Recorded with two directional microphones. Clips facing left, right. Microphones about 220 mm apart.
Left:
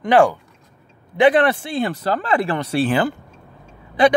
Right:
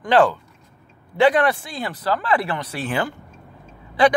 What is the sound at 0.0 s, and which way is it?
Speech, 15° left (ahead or behind).